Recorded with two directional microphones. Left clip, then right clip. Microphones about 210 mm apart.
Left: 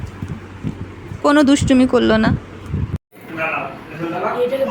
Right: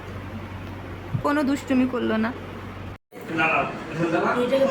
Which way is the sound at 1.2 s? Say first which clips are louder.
Left 10 dB; 30° left (ahead or behind).